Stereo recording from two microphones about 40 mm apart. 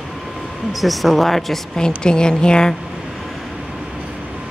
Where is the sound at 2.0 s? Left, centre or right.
Left.